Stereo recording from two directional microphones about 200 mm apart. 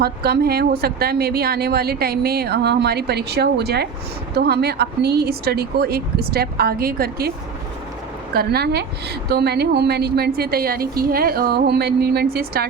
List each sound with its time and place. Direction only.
0.0 s speech: 50° right (ahead or behind)